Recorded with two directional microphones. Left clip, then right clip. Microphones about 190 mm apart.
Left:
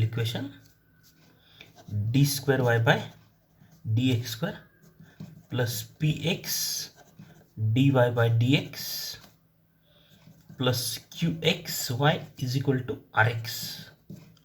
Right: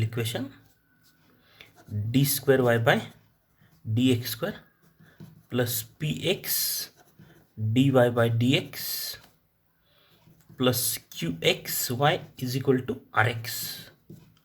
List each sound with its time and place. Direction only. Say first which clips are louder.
0.0 s speech: right 2 dB; 45° right (ahead or behind)
2.1 s speech: right 3 dB; 45° right (ahead or behind)
10.6 s speech: right 2 dB; 45° right (ahead or behind)